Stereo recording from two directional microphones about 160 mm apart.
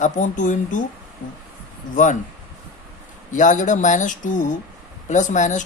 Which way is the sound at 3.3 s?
50° left (ahead or behind).